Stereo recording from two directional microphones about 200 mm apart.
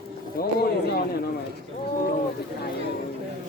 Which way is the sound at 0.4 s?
50° left (ahead or behind).